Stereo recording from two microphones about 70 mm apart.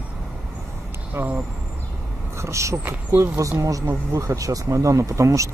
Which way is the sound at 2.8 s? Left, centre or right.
Right.